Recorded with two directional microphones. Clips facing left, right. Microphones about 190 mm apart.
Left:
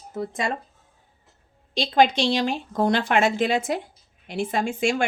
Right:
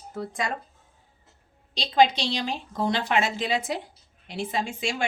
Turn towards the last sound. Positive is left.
turn(degrees=50)  # may be behind; listen again after turning